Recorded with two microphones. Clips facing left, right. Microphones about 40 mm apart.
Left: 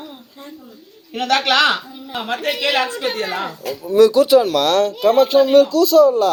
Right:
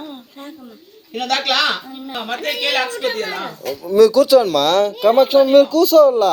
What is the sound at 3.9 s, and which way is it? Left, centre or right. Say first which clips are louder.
Speech: right 1 dB; left.